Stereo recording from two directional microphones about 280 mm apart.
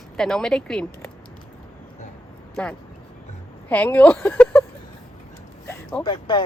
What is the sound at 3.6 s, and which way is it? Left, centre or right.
Speech, centre.